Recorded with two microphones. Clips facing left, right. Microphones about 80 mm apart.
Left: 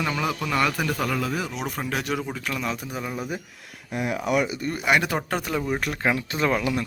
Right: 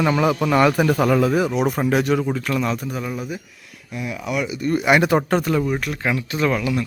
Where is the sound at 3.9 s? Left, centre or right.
Left.